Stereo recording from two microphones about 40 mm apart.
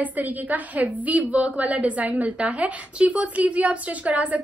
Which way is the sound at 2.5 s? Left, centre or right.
Right.